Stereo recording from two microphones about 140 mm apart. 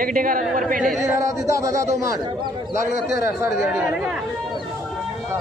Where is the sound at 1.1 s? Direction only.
20° right (ahead or behind).